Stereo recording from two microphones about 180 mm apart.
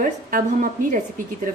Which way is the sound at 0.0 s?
50° right (ahead or behind).